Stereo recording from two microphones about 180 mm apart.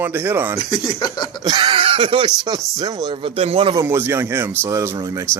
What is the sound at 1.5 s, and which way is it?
Speech, 25° right (ahead or behind).